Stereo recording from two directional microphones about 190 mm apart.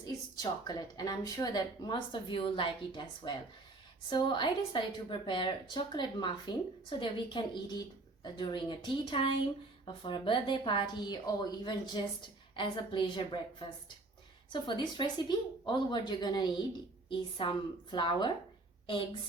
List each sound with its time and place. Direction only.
0.0 s speech: 20° left (ahead or behind)